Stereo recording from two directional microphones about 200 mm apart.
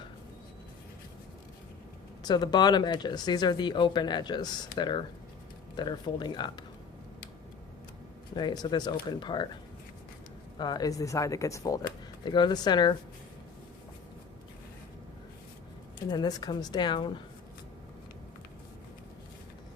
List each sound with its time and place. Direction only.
2.2 s speech: 20° left (ahead or behind)
8.4 s speech: 20° left (ahead or behind)
10.6 s speech: 20° left (ahead or behind)
16.0 s speech: 20° left (ahead or behind)